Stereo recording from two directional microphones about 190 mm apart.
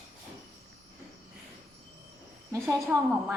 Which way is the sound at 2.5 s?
15° right (ahead or behind).